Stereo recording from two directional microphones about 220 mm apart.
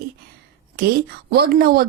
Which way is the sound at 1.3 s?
45° right (ahead or behind).